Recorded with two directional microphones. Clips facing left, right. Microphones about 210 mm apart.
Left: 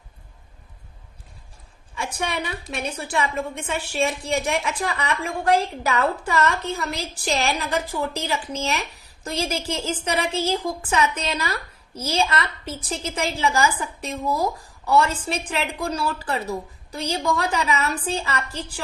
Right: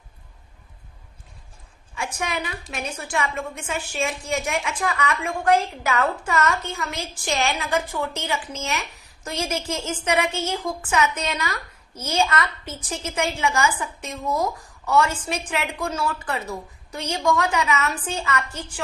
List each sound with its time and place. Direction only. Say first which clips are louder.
2.1 s a woman's voice: left 2 dB; 30° left (ahead or behind)